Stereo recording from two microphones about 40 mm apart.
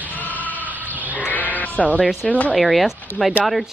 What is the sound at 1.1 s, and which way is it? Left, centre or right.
Sheep, left.